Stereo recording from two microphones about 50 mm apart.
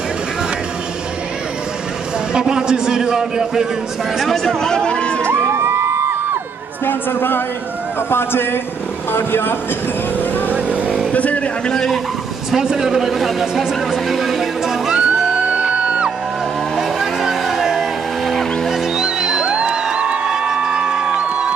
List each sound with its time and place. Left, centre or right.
2.3 s a man's voice: centre
4.2 s speech: centre
5.2 s music: right
6.9 s a woman's voice: left
10.5 s vehicle: right
11.1 s a sound: left
11.6 s a man's voice: centre
12.4 s a man's voice: centre
14.1 s music: centre
15.0 s music: right
16.7 s vehicle: centre
18.2 s music: centre
18.9 s music: centre